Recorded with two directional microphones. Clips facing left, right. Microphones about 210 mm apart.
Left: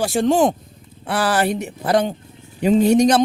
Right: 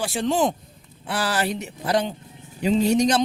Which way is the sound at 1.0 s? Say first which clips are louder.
Left 5 dB; 55° left (ahead or behind).